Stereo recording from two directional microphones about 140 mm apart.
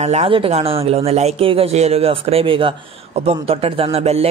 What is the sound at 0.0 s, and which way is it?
A man's voice, 50° right (ahead or behind).